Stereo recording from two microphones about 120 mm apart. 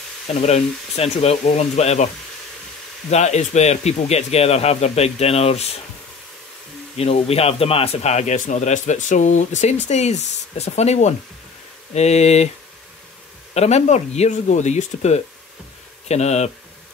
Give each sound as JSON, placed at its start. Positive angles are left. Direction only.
{"t": 0.3, "sound": "speech", "side_deg": 60}
{"t": 3.1, "sound": "speech", "side_deg": 65}
{"t": 7.0, "sound": "a man's voice", "side_deg": 60}
{"t": 13.6, "sound": "a man's voice", "side_deg": 70}